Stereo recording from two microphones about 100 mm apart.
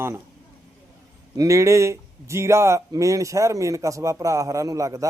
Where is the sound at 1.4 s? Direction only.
30° right (ahead or behind).